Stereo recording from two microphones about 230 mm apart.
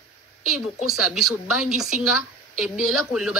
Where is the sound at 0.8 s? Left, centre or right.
Centre.